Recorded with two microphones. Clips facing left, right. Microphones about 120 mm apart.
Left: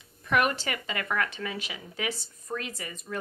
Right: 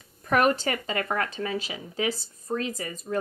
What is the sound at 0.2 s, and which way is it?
Speech, 35° right (ahead or behind).